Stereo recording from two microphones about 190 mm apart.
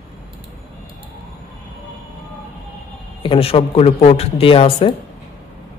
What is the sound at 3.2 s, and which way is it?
A woman's voice, 30° left (ahead or behind).